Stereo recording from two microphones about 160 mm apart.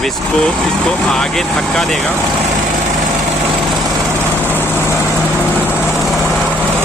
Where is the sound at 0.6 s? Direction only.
5° left (ahead or behind).